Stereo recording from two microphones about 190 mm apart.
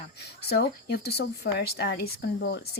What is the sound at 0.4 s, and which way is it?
Speech, 55° left (ahead or behind).